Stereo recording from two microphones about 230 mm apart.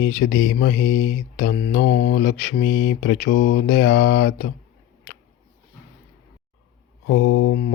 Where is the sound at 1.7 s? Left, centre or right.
Left.